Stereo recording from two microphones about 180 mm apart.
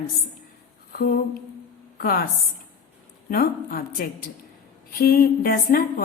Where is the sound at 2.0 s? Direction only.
55° left (ahead or behind).